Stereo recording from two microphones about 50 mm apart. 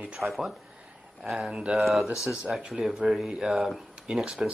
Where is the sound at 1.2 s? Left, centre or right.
Centre.